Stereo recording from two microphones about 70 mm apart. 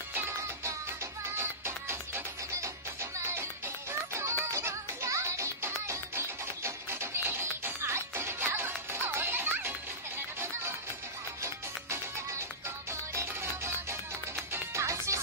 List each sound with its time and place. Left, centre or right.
1.3 s music: right
11.4 s music: right